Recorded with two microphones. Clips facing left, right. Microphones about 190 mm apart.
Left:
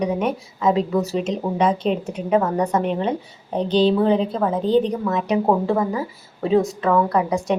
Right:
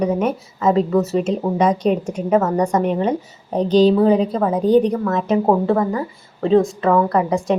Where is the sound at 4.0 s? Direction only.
Centre (ahead or behind).